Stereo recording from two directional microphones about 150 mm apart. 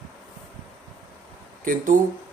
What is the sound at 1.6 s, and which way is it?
Speech, 65° right (ahead or behind).